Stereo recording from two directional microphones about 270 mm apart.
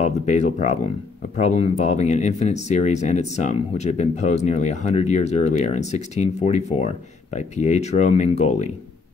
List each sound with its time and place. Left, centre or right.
0.0 s speech: left